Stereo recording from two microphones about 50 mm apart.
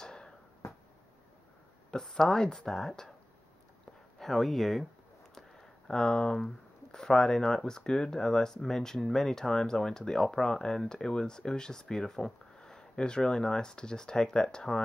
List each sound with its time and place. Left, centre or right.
0.0 s a sound: centre
1.9 s speech: centre
4.2 s speech: centre